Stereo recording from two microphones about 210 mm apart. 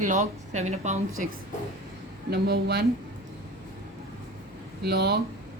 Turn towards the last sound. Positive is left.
turn(degrees=-50)  # may be behind; listen again after turning